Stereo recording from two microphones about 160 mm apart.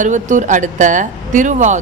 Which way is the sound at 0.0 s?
50° right (ahead or behind).